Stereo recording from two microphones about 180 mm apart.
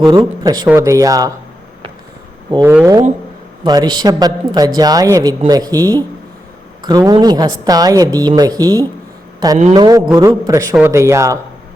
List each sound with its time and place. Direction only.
0.4 s a woman's voice: 20° right (ahead or behind)
2.5 s a woman's voice: 20° right (ahead or behind)